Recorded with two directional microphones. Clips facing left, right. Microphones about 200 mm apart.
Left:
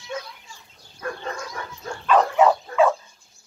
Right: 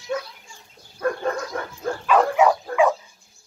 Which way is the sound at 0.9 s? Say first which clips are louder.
Right 7 dB; 55° right (ahead or behind).